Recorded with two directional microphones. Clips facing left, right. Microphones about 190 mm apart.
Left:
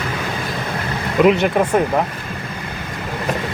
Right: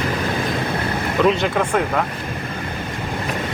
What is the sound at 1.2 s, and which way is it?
Speech, 15° left (ahead or behind).